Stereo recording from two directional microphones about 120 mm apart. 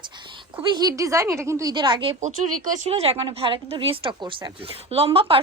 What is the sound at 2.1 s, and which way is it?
A woman's voice, 90° right.